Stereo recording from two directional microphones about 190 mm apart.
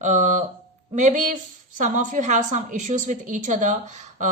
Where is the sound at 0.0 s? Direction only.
40° right (ahead or behind).